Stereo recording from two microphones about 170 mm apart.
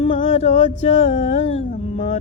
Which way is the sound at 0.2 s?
45° left (ahead or behind).